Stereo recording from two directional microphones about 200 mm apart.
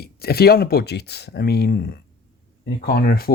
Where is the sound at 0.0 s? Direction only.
50° left (ahead or behind).